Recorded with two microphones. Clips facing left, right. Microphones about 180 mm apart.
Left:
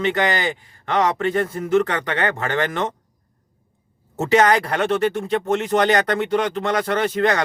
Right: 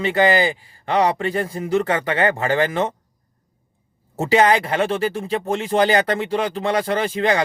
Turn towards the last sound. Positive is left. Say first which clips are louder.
# even
turn(degrees=-25)  # may be behind; listen again after turning